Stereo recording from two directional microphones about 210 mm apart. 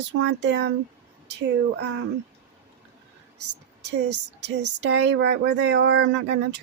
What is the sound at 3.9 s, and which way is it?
Speech, 55° right (ahead or behind).